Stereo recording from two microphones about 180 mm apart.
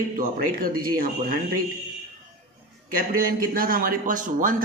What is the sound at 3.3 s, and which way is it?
Speech, 55° right (ahead or behind).